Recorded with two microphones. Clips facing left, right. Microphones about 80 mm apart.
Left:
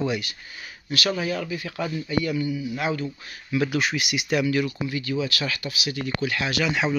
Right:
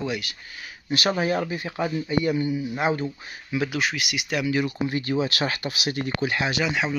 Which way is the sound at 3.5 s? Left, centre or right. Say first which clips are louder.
Left 2 dB; centre.